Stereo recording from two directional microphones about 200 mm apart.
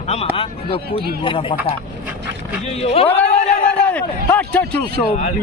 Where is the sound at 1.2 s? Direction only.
25° left (ahead or behind).